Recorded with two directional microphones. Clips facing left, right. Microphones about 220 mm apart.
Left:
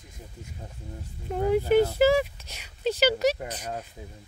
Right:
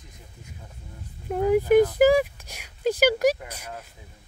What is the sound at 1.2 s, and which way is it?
Speech, 10° right (ahead or behind).